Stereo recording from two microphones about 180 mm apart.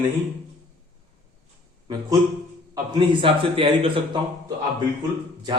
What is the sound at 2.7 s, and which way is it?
A man's voice, 25° right (ahead or behind).